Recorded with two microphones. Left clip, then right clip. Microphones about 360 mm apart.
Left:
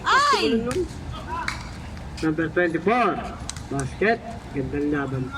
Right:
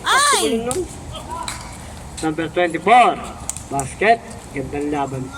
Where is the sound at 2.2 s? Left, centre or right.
Centre.